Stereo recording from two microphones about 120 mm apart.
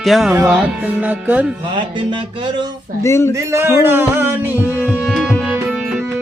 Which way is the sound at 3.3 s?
20° right (ahead or behind).